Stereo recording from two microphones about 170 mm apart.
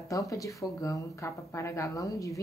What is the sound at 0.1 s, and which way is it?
Speech, 20° left (ahead or behind).